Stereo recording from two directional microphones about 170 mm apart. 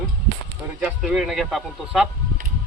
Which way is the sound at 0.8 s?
5° right (ahead or behind).